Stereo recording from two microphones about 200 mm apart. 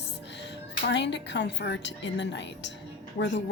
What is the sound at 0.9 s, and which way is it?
A woman's voice, 60° left (ahead or behind).